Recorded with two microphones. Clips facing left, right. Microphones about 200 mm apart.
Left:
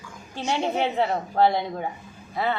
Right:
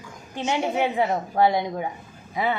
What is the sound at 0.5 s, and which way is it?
A woman's voice, 10° right (ahead or behind).